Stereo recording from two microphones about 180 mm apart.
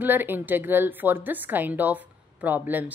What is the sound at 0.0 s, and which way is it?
A woman's voice, 10° right (ahead or behind).